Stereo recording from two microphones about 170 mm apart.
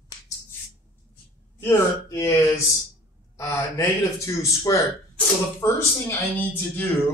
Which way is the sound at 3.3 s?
15° left (ahead or behind).